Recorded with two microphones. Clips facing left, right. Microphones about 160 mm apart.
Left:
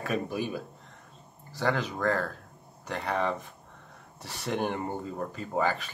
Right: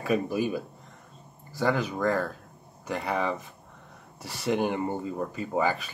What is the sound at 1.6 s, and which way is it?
Speech, 5° right (ahead or behind).